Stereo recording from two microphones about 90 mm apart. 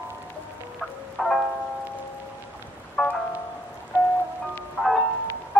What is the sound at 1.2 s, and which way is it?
Music, centre (ahead or behind).